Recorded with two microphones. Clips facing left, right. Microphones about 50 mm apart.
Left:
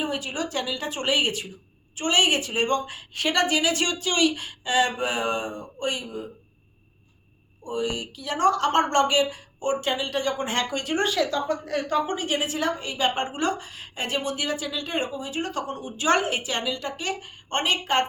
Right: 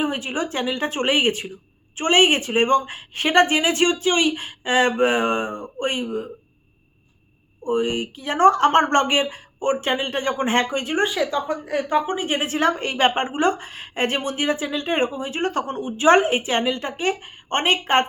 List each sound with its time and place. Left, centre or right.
0.0 s speech: right
7.6 s speech: right